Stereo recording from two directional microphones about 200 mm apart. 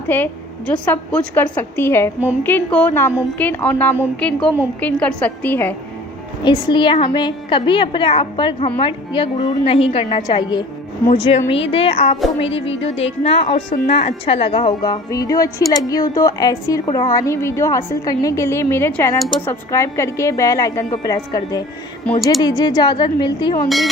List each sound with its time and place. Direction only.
0.1 s a woman's voice: 10° left (ahead or behind)
6.4 s a woman's voice: 20° left (ahead or behind)
13.2 s a woman's voice: 30° left (ahead or behind)
23.6 s a woman's voice: centre (ahead or behind)